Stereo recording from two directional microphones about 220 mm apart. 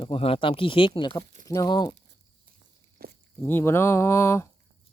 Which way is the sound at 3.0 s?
45° right (ahead or behind).